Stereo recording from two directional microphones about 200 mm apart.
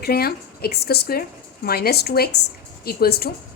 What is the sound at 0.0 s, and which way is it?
A woman's voice, 50° left (ahead or behind).